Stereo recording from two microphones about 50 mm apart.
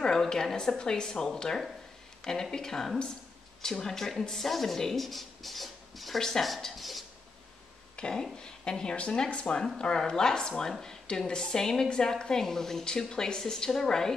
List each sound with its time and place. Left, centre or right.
0.0 s a woman's voice: centre
7.9 s a woman's voice: centre